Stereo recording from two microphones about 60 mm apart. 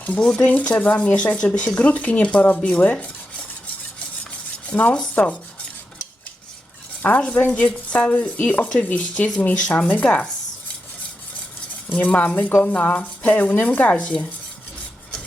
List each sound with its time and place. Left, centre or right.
0.0 s speech: left
4.7 s dishes: left
5.1 s speech: left
7.0 s speech: left
11.9 s speech: left